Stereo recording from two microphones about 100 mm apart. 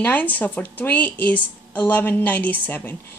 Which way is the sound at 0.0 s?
20° left (ahead or behind).